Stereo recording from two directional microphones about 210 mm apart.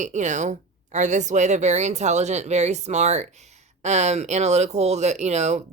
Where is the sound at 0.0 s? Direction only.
35° right (ahead or behind).